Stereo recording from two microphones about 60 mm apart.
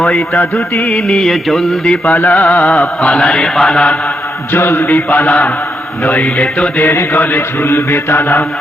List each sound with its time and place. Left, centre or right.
0.1 s music: left
0.9 s music: centre
2.0 s music: left
3.0 s mantra: centre
4.5 s mantra: left
5.1 s music: left
6.2 s mantra: centre
6.7 s mantra: left